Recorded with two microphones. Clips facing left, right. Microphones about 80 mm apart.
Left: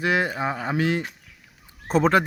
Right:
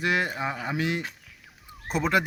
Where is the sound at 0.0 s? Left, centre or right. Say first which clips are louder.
Left 3 dB; left.